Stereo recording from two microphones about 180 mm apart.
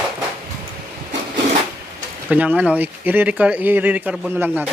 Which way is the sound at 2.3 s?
10° right (ahead or behind).